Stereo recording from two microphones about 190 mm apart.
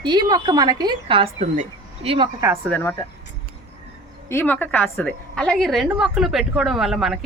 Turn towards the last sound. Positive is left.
turn(degrees=0)  # may be behind; listen again after turning